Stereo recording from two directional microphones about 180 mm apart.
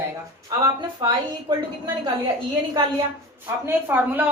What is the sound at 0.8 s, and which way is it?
Speech, 25° right (ahead or behind).